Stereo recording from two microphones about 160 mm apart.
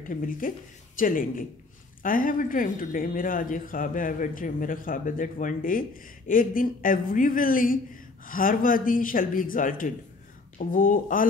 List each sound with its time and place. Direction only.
0.1 s speech: 60° left (ahead or behind)